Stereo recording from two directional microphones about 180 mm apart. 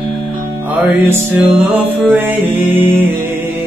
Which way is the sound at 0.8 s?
10° right (ahead or behind).